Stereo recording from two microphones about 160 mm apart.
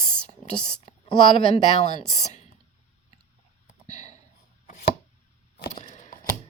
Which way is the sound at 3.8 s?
50° left (ahead or behind).